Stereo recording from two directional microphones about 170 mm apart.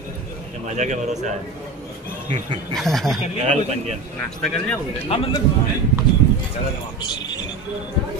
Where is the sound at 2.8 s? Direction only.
Centre (ahead or behind).